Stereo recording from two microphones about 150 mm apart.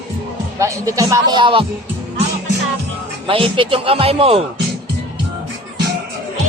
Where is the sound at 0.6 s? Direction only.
20° right (ahead or behind).